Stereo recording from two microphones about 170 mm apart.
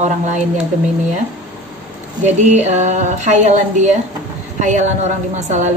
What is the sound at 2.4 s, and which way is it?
A woman's voice, 45° right (ahead or behind).